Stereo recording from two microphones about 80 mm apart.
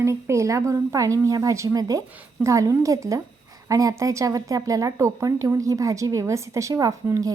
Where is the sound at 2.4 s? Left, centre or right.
Right.